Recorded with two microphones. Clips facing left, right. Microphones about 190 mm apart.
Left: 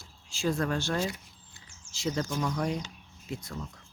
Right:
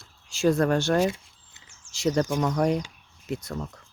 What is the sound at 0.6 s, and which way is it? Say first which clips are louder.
Speech: right 8 dB; 70° right (ahead or behind).